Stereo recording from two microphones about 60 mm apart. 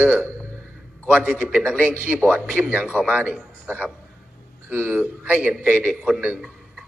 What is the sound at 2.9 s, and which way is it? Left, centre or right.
Speech, right.